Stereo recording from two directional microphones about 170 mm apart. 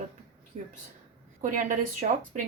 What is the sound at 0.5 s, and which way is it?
A woman's voice, 45° right (ahead or behind).